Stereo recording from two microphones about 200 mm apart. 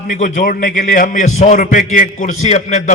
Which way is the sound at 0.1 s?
40° left (ahead or behind).